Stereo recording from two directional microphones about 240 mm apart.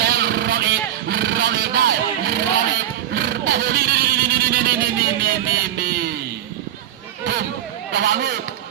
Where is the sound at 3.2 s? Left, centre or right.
Right.